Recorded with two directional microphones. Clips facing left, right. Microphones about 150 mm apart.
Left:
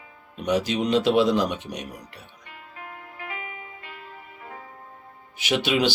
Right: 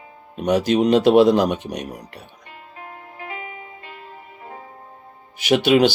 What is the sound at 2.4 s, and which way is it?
Music, 30° right (ahead or behind).